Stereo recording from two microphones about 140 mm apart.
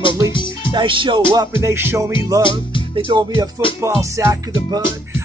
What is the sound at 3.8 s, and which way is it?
Music, 20° right (ahead or behind).